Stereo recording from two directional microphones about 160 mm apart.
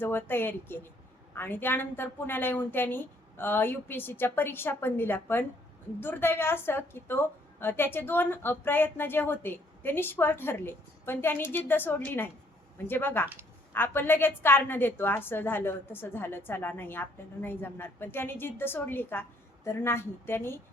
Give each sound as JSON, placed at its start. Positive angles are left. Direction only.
{"t": 0.0, "sound": "a woman's voice", "side_deg": 15}